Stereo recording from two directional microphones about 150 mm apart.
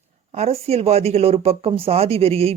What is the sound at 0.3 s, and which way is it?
Speech, 45° right (ahead or behind).